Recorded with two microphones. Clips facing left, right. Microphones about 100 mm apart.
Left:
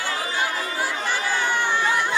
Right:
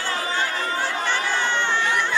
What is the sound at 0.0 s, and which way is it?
Chatter, 10° left (ahead or behind).